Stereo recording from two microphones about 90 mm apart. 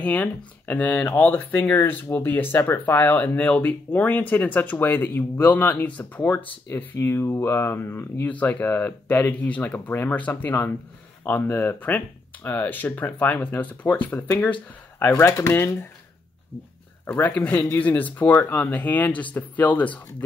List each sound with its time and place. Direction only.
0.0 s speech: 20° left (ahead or behind)
17.0 s speech: 20° left (ahead or behind)